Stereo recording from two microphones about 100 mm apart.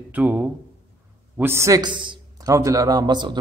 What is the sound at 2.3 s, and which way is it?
A man's voice, 35° right (ahead or behind).